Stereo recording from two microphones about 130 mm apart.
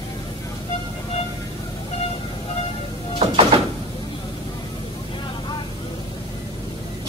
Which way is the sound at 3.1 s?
50° right (ahead or behind).